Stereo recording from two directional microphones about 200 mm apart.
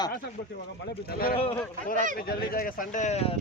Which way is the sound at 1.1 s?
50° left (ahead or behind).